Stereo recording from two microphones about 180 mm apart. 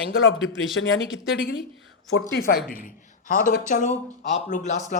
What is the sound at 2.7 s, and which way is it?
A woman's voice, 50° left (ahead or behind).